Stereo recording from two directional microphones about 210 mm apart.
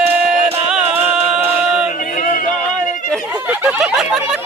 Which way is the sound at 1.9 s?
35° left (ahead or behind).